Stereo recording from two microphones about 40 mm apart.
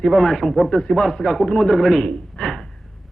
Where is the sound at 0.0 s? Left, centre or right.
Centre.